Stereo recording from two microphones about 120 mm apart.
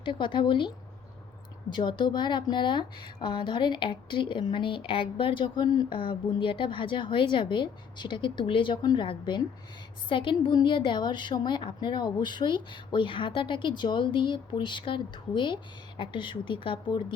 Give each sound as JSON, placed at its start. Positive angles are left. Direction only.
{"t": 0.0, "sound": "a woman's voice", "side_deg": 45}
{"t": 1.7, "sound": "a woman's voice", "side_deg": 40}